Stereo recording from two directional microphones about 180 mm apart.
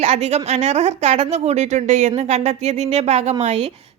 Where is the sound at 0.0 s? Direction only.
40° right (ahead or behind).